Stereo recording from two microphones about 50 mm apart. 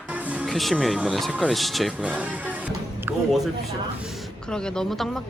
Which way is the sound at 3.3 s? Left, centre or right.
Centre.